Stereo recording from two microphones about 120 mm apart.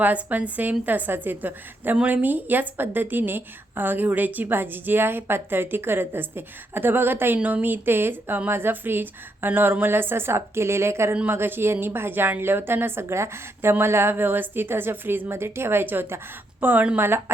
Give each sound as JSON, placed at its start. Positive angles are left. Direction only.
{"t": 0.0, "sound": "a woman's voice", "side_deg": -15}